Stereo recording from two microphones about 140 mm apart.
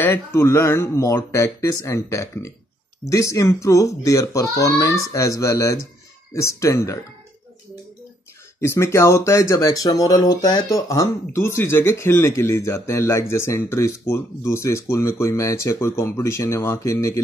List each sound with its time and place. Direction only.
0.0 s speech: 15° left (ahead or behind)
8.5 s speech: 20° left (ahead or behind)